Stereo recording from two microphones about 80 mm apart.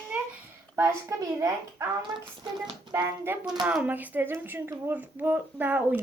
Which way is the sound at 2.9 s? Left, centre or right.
Right.